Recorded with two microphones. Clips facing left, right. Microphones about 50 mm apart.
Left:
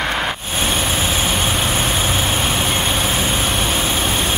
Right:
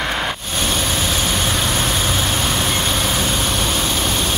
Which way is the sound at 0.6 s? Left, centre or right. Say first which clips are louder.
Left 1 dB; left.